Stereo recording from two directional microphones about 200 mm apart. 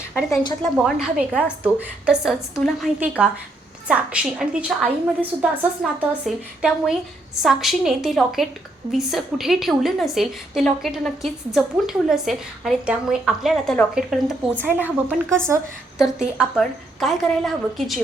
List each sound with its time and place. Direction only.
0.1 s a woman's voice: centre (ahead or behind)